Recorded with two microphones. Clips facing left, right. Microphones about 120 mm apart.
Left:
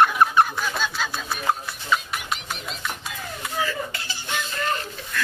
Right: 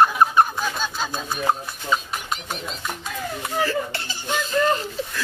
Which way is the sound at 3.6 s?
40° right (ahead or behind).